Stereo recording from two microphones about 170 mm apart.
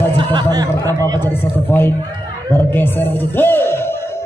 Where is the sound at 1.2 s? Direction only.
10° left (ahead or behind).